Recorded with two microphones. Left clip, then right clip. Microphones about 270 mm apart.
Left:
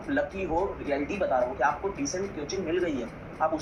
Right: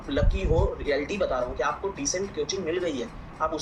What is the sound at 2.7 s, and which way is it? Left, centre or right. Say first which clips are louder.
Speech: right 1 dB; centre.